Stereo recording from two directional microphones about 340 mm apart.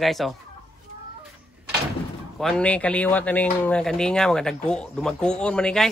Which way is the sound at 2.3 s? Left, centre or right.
Centre.